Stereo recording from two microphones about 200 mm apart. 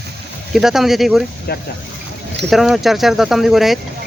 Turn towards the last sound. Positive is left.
turn(degrees=0)  # may be behind; listen again after turning